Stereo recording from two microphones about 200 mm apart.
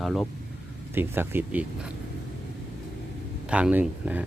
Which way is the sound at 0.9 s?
10° right (ahead or behind).